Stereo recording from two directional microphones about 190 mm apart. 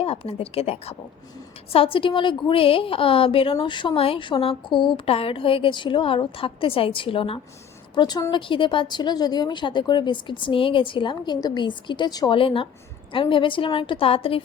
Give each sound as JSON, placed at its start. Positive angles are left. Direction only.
{"t": 0.0, "sound": "a woman's voice", "side_deg": 30}